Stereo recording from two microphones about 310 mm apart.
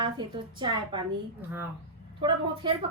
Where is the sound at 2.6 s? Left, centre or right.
Centre.